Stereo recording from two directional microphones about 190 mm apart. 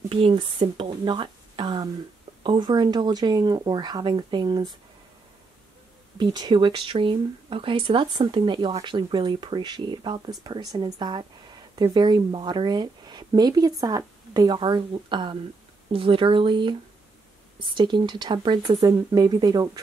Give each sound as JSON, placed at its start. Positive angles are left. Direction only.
{"t": 0.1, "sound": "speech", "side_deg": -25}
{"t": 6.1, "sound": "speech", "side_deg": -25}